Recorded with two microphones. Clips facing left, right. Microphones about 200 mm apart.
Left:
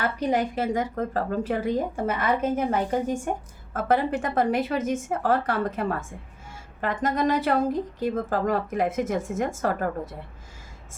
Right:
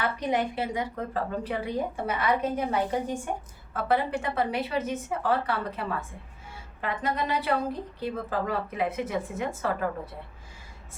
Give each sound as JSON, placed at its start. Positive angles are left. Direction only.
{"t": 0.0, "sound": "a woman's voice", "side_deg": 40}